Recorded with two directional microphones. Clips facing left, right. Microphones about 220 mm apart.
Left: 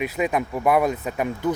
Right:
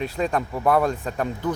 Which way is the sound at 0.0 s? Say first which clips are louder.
Left 1 dB; 5° left (ahead or behind).